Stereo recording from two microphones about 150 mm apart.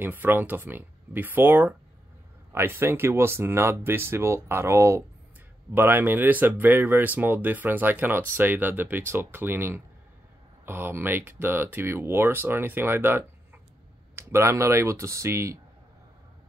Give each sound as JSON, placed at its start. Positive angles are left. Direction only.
{"t": 0.0, "sound": "speech", "side_deg": -15}